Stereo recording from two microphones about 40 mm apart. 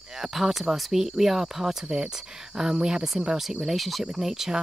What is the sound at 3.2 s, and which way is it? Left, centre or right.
Speech, right.